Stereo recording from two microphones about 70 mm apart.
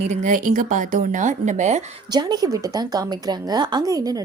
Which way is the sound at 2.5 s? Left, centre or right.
Right.